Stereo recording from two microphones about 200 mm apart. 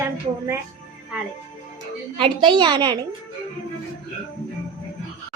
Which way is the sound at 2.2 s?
25° right (ahead or behind).